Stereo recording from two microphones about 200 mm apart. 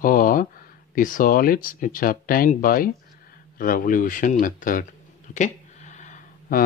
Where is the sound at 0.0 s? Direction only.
45° left (ahead or behind).